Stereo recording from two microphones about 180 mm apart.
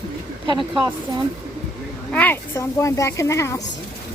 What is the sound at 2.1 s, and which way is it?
A woman's voice, 10° left (ahead or behind).